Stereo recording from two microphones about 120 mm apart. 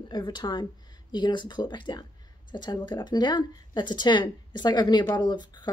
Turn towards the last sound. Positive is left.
turn(degrees=40)  # may be behind; listen again after turning